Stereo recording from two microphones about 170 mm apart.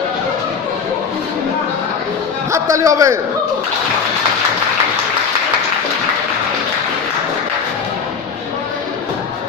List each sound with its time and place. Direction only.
2.5 s a man's voice: 20° right (ahead or behind)